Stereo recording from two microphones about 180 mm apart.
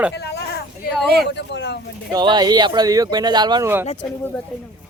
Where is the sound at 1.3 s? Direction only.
75° left (ahead or behind).